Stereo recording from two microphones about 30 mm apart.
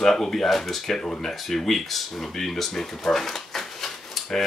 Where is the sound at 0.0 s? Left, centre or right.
Centre.